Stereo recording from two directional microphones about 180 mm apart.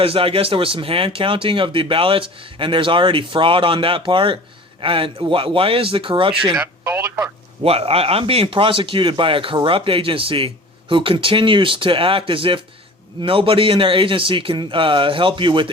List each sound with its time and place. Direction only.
0.0 s speech: 30° right (ahead or behind)
6.6 s speech: 15° right (ahead or behind)
7.6 s speech: 35° right (ahead or behind)